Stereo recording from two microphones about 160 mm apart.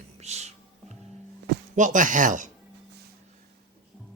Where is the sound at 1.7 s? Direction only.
50° right (ahead or behind).